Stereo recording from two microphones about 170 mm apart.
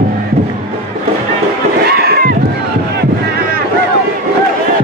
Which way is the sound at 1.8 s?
65° right (ahead or behind).